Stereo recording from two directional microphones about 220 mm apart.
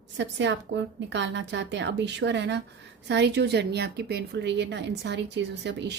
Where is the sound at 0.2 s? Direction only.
55° right (ahead or behind).